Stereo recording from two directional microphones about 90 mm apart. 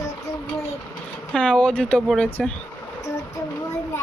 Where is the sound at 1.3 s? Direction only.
15° left (ahead or behind).